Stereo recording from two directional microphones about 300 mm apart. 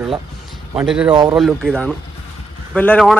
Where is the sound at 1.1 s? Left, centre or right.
Centre.